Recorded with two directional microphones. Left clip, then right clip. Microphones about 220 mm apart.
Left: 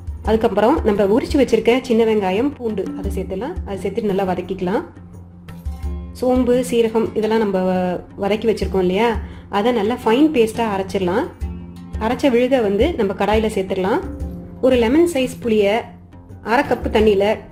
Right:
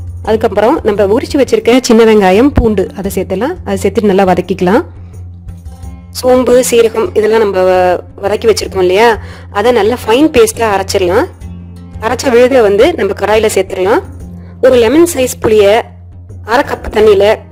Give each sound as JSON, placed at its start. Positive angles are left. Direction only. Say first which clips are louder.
{"t": 0.3, "sound": "speech", "louder": "right 6 dB", "side_deg": -50}
{"t": 6.1, "sound": "speech", "louder": "right 10 dB", "side_deg": -50}